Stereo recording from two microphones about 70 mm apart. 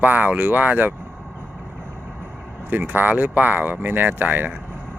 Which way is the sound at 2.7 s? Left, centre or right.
Right.